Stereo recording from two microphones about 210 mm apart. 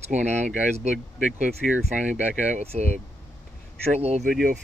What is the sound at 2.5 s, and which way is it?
Speech, 30° right (ahead or behind).